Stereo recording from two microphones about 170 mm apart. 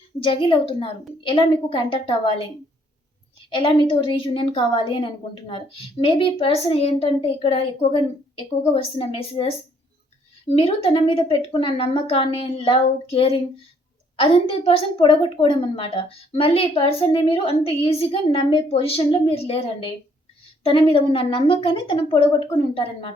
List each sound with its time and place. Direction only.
0.2 s a woman's voice: 30° left (ahead or behind)
3.5 s a woman's voice: 30° left (ahead or behind)
10.5 s a woman's voice: 35° left (ahead or behind)